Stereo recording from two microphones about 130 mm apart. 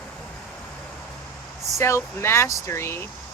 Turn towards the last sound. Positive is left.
turn(degrees=15)  # may be behind; listen again after turning